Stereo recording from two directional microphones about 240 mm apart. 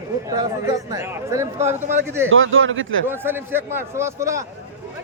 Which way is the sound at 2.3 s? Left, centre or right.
Right.